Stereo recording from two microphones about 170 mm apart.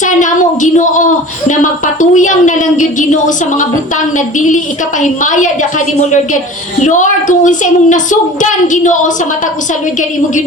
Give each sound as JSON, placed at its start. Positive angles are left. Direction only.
{"t": 0.0, "sound": "a sound", "side_deg": 50}
{"t": 1.5, "sound": "a woman's voice", "side_deg": 50}
{"t": 6.8, "sound": "a woman's voice", "side_deg": 45}